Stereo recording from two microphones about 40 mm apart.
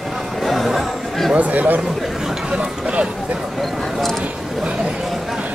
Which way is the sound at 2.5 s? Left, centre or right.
Right.